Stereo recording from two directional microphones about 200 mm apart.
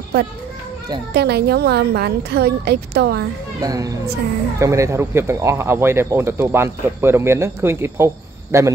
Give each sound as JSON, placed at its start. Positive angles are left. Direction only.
{"t": 1.1, "sound": "a woman's voice", "side_deg": -55}
{"t": 3.6, "sound": "speech", "side_deg": -20}